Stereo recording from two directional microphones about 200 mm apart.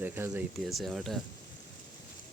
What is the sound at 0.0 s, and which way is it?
Speech, 10° right (ahead or behind).